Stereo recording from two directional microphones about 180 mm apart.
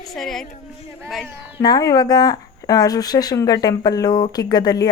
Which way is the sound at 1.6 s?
20° left (ahead or behind).